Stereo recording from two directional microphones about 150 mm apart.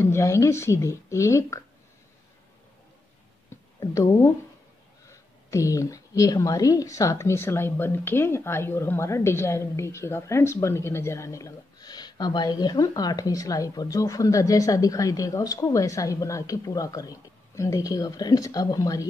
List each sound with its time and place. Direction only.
0.0 s speech: 20° left (ahead or behind)
3.8 s speech: 20° left (ahead or behind)